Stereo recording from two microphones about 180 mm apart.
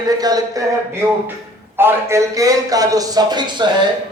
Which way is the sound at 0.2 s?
20° right (ahead or behind).